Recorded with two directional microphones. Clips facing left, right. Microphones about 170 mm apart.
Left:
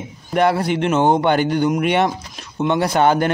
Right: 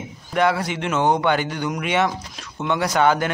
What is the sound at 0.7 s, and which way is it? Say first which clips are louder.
Speech: left 5 dB; 35° left (ahead or behind).